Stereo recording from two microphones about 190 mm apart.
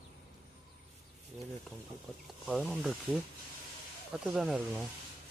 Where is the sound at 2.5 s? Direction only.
Centre (ahead or behind).